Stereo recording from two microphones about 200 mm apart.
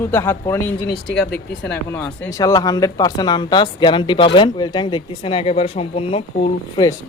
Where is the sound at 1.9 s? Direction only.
15° left (ahead or behind).